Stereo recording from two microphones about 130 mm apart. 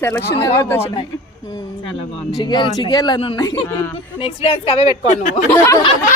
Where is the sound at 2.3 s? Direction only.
35° left (ahead or behind).